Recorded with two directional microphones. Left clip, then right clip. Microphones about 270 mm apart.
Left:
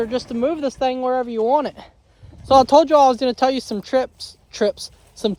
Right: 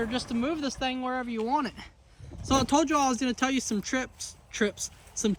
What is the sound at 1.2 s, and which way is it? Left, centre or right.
Speech, centre.